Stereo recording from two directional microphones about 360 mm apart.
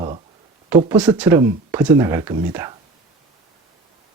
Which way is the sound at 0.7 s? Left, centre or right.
Centre.